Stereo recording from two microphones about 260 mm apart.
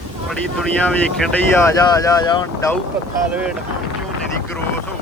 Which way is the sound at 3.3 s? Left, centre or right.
Centre.